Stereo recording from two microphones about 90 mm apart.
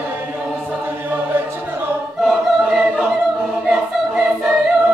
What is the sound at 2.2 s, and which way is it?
Choir, centre (ahead or behind).